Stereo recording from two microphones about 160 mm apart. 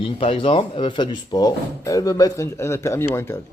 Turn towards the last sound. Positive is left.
turn(degrees=15)  # may be behind; listen again after turning